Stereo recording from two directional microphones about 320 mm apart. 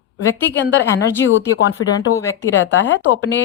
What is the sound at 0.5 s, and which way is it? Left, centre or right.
Speech, left.